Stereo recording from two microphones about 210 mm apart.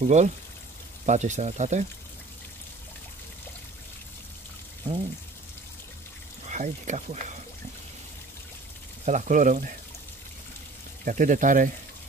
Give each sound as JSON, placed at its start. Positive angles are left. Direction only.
{"t": 0.0, "sound": "speech", "side_deg": -35}
{"t": 6.5, "sound": "speech", "side_deg": -35}
{"t": 9.0, "sound": "speech", "side_deg": -35}
{"t": 11.1, "sound": "speech", "side_deg": -40}